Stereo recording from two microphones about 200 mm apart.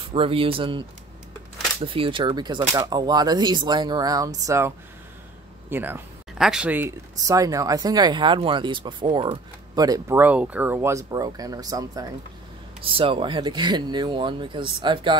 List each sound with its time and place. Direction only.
0.1 s speech: 25° right (ahead or behind)